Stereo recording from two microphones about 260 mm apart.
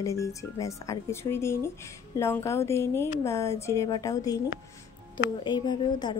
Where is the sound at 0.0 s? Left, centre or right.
Centre.